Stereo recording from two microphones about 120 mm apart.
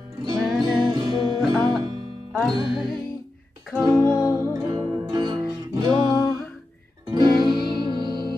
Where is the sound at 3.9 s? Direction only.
25° right (ahead or behind).